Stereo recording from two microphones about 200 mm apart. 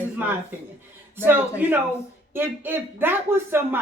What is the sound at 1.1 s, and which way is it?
Speech, 10° right (ahead or behind).